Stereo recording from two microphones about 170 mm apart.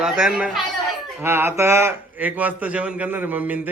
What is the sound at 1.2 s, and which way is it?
A man's voice, 15° right (ahead or behind).